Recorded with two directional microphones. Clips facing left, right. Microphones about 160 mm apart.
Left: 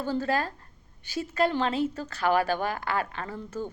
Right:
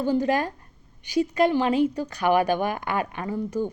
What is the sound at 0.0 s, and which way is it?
Speech, 15° right (ahead or behind).